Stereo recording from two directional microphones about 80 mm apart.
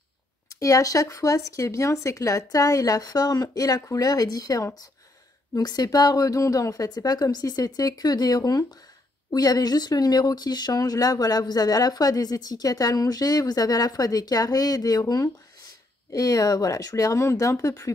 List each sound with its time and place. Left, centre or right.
0.6 s speech: left